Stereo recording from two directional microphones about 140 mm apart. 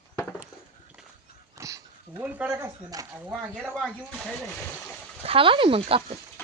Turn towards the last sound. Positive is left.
turn(degrees=-40)  # may be behind; listen again after turning